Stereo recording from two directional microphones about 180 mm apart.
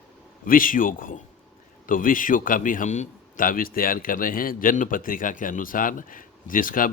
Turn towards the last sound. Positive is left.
turn(degrees=50)  # may be behind; listen again after turning